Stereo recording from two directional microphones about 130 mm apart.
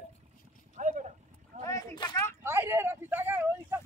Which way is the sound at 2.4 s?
20° right (ahead or behind).